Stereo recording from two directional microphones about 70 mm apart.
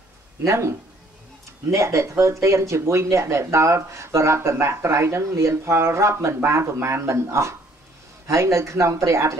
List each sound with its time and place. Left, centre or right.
0.5 s speech: right